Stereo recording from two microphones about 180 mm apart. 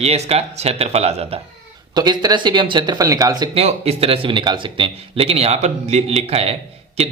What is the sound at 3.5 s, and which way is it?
Speech, 35° right (ahead or behind).